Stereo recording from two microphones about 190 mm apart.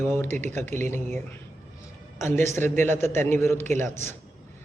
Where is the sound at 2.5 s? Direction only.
10° left (ahead or behind).